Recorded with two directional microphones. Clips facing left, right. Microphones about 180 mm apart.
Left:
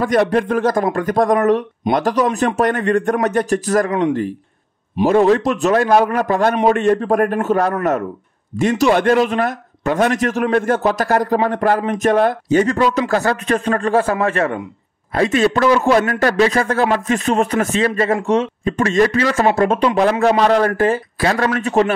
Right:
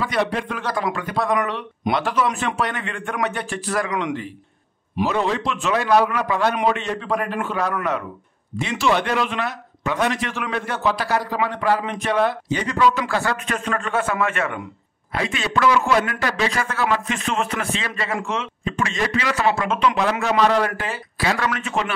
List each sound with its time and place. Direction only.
0.0 s a man's voice: 45° left (ahead or behind)
5.0 s a man's voice: 50° left (ahead or behind)
15.1 s a man's voice: 45° left (ahead or behind)